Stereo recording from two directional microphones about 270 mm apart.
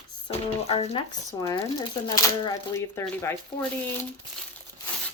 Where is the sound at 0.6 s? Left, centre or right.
Left.